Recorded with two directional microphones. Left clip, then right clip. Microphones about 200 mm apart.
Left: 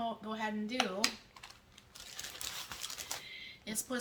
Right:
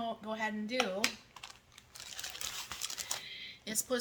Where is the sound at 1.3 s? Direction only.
20° right (ahead or behind).